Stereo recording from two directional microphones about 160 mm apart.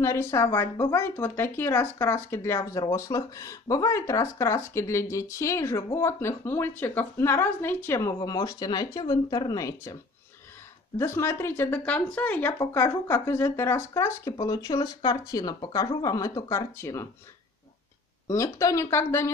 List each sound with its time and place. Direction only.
0.0 s speech: 20° left (ahead or behind)
11.0 s speech: 15° left (ahead or behind)
18.3 s speech: 20° left (ahead or behind)